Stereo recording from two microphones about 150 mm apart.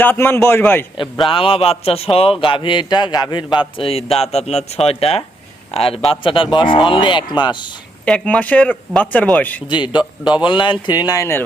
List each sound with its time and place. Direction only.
0.0 s speech: 15° left (ahead or behind)
1.3 s a man's voice: 40° left (ahead or behind)
8.0 s speech: 5° left (ahead or behind)
9.6 s a man's voice: 30° left (ahead or behind)